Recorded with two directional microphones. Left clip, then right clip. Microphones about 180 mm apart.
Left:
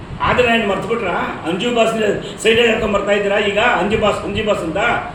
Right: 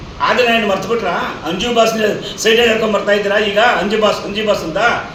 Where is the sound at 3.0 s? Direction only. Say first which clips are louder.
Right 2 dB; 20° left (ahead or behind).